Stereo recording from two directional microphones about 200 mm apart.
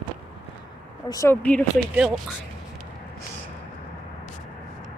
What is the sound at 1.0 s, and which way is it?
Speech, 15° left (ahead or behind).